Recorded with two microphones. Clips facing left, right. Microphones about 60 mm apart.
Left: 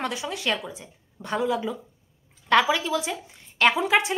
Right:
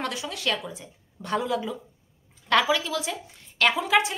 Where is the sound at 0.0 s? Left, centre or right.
Centre.